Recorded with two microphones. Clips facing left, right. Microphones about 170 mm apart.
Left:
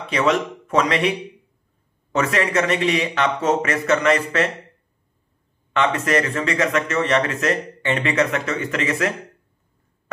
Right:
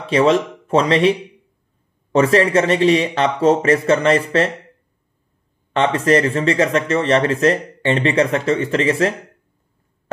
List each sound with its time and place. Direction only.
0.0 s speech: 30° right (ahead or behind)
2.1 s speech: 30° right (ahead or behind)
5.7 s speech: 30° right (ahead or behind)